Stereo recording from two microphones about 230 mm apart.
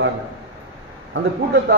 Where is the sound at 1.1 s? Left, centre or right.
Right.